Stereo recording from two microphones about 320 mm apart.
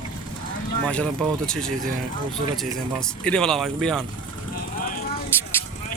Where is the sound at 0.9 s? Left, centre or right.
Centre.